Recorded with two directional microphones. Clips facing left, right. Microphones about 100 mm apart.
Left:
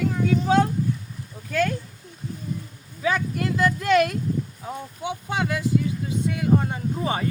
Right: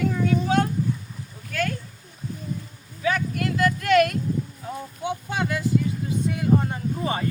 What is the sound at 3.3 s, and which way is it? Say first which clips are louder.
Speech: even; 20° left (ahead or behind).